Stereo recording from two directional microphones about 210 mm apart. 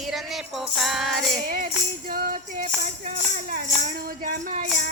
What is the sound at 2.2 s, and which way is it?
Music, 40° right (ahead or behind).